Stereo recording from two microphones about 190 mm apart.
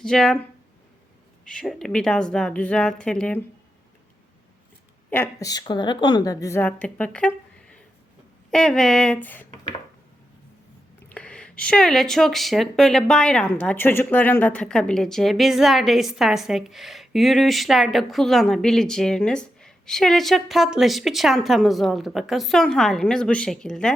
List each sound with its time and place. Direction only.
0.0 s speech: 5° left (ahead or behind)
1.5 s speech: centre (ahead or behind)
5.1 s a woman's voice: 15° left (ahead or behind)
11.1 s speech: 5° left (ahead or behind)